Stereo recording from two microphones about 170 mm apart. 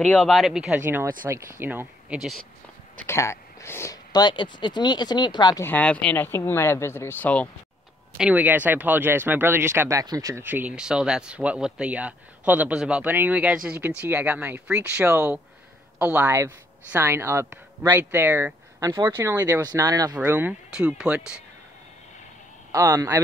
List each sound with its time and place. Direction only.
0.0 s speech: 10° left (ahead or behind)
3.1 s speech: 15° left (ahead or behind)
5.7 s speech: 10° left (ahead or behind)
8.2 s speech: 10° right (ahead or behind)
20.2 s speech: 10° right (ahead or behind)
22.7 s speech: 20° right (ahead or behind)